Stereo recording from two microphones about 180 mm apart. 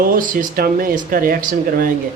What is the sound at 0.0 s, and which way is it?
A man's voice, 50° right (ahead or behind).